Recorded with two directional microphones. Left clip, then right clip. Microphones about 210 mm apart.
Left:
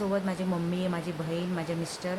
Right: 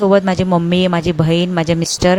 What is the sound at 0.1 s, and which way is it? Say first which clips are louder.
A woman's voice: right 18 dB; 45° right (ahead or behind).